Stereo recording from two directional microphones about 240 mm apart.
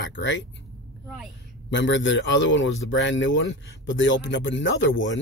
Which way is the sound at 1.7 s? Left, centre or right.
Left.